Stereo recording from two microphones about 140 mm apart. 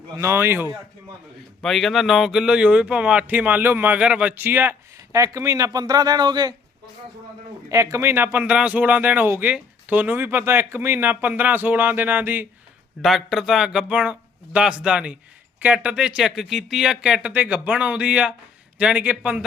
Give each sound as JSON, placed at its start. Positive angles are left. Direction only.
{"t": 0.2, "sound": "a man's voice", "side_deg": -20}
{"t": 1.6, "sound": "a man's voice", "side_deg": 0}
{"t": 7.7, "sound": "a man's voice", "side_deg": -20}
{"t": 13.0, "sound": "a man's voice", "side_deg": 0}